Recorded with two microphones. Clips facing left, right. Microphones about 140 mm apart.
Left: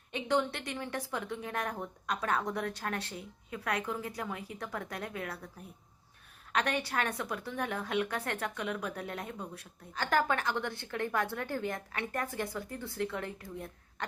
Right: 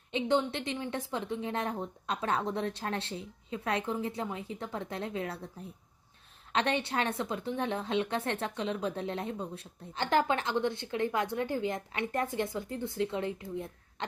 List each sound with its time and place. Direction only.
0.1 s a woman's voice: 20° right (ahead or behind)
6.5 s a woman's voice: 25° right (ahead or behind)